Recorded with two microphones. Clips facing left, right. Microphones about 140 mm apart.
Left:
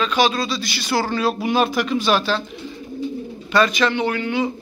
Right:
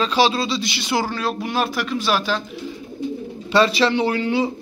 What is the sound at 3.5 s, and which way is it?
Speech, 30° right (ahead or behind).